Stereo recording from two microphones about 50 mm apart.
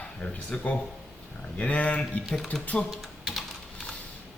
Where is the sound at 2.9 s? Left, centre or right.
Centre.